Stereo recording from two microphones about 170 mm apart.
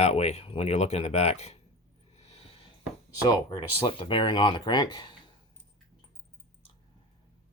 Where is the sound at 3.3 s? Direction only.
25° left (ahead or behind).